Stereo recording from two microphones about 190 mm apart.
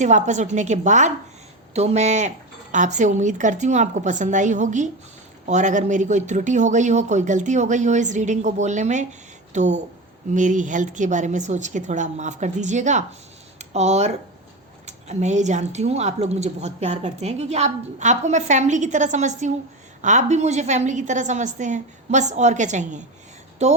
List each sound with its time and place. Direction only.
0.0 s a woman's voice: 40° right (ahead or behind)